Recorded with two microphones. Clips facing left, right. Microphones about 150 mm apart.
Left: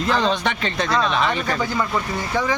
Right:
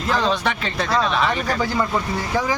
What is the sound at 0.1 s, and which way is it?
Speech, 5° right (ahead or behind).